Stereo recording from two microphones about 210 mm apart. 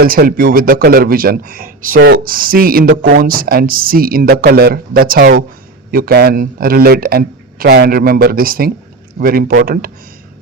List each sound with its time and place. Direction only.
0.0 s speech: 45° right (ahead or behind)